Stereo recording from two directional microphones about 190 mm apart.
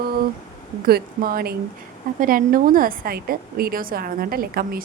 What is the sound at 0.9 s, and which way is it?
Speech, 50° right (ahead or behind).